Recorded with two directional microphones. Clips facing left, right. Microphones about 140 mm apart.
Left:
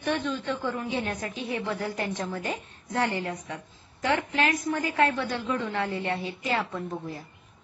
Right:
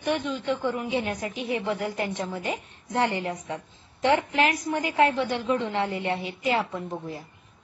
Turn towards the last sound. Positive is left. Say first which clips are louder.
# right 1 dB
turn(degrees=-20)  # may be behind; listen again after turning